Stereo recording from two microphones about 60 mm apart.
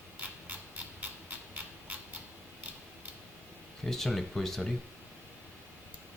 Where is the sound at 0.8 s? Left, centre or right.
Right.